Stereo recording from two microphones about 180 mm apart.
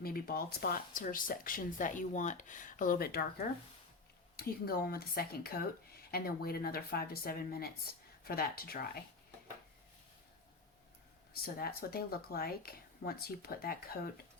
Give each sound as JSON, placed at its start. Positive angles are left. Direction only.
{"t": 0.0, "sound": "speech", "side_deg": 55}
{"t": 11.4, "sound": "speech", "side_deg": 60}